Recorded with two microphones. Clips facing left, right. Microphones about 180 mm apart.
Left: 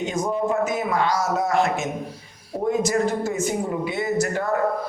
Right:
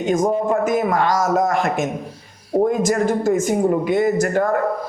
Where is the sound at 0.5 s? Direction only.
50° right (ahead or behind).